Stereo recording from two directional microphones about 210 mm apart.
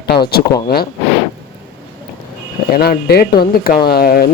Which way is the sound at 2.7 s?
45° left (ahead or behind).